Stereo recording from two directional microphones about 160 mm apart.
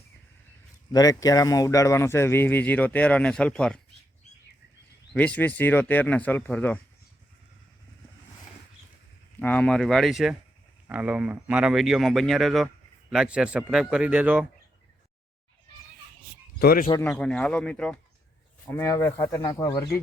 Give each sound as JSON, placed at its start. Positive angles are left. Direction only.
{"t": 0.9, "sound": "speech", "side_deg": 20}
{"t": 5.1, "sound": "speech", "side_deg": 10}
{"t": 9.4, "sound": "speech", "side_deg": 10}
{"t": 16.6, "sound": "speech", "side_deg": 65}
{"t": 17.0, "sound": "speech", "side_deg": 10}